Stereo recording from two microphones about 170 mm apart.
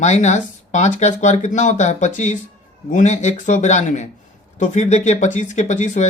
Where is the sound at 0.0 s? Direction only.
45° left (ahead or behind).